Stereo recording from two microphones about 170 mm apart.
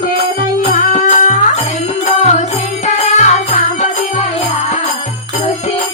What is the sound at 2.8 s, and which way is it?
Music, 45° left (ahead or behind).